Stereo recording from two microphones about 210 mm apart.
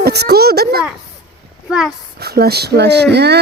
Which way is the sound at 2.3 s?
50° right (ahead or behind).